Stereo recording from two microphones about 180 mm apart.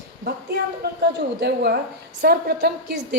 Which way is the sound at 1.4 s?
65° right (ahead or behind).